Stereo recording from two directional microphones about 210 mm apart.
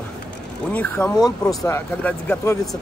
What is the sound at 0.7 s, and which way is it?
Speech, 5° left (ahead or behind).